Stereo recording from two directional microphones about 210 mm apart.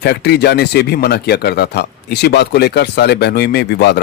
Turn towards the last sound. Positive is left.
turn(degrees=55)  # may be behind; listen again after turning